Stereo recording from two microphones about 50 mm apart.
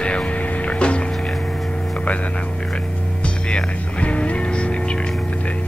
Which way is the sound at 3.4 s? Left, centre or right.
Left.